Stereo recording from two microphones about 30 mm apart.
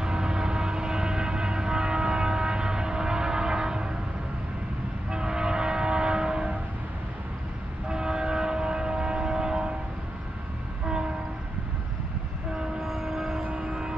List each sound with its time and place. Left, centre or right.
0.0 s train: right
5.1 s train: right
7.9 s train: right
10.9 s train: right
12.8 s vehicle: centre
13.6 s vehicle: right